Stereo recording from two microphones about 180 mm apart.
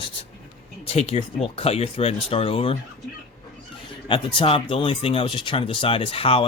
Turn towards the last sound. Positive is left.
turn(degrees=30)  # may be behind; listen again after turning